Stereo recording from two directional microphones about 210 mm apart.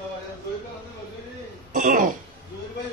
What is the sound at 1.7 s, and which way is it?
Throat clearing, 40° right (ahead or behind).